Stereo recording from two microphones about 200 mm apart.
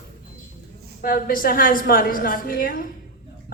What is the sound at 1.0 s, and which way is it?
A man's voice, 45° left (ahead or behind).